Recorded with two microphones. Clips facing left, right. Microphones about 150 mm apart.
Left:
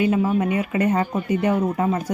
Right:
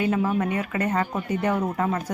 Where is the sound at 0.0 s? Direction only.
10° left (ahead or behind).